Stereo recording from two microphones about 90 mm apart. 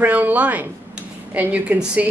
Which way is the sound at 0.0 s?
20° right (ahead or behind).